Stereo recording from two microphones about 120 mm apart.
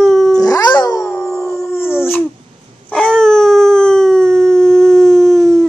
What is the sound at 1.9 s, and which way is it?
Dog, 20° left (ahead or behind).